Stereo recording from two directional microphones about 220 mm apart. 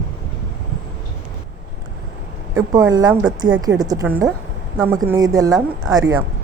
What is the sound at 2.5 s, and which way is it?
A woman's voice, 15° right (ahead or behind).